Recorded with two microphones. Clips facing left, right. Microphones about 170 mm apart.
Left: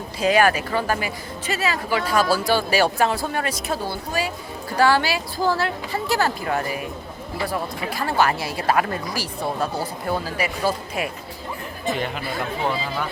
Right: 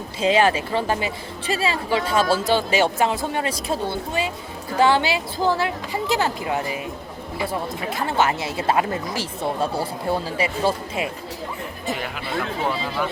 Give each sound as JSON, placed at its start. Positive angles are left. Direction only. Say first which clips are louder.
{"t": 0.2, "sound": "speech", "louder": "even", "side_deg": -25}